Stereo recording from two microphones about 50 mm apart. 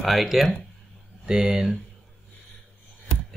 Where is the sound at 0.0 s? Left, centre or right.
Centre.